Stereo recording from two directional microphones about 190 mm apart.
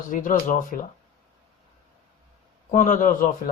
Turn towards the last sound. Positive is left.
turn(degrees=45)  # may be behind; listen again after turning